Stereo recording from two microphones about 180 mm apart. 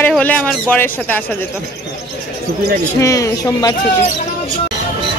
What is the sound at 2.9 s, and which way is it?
Speech, 15° left (ahead or behind).